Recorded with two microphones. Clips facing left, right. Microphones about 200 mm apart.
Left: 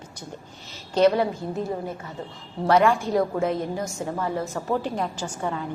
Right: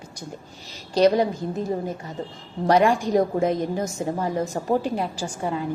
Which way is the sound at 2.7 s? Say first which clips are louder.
Right 1 dB; 15° right (ahead or behind).